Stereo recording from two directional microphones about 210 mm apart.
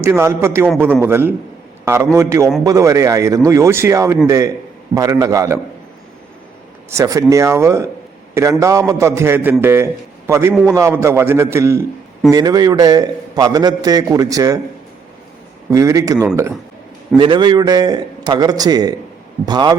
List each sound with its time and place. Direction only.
0.0 s a man's voice: 10° right (ahead or behind)
6.9 s a man's voice: 15° right (ahead or behind)
15.7 s a man's voice: 15° right (ahead or behind)